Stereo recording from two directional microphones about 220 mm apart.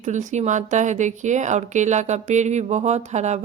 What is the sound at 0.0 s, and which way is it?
A woman's voice, 35° right (ahead or behind).